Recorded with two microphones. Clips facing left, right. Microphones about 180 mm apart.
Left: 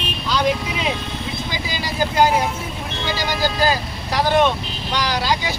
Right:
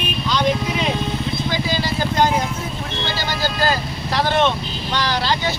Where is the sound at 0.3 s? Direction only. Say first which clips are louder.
Even; 5° left (ahead or behind).